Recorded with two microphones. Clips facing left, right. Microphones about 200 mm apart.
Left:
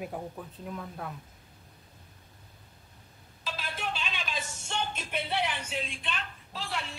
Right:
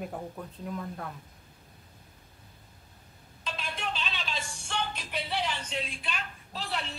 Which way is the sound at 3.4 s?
5° left (ahead or behind).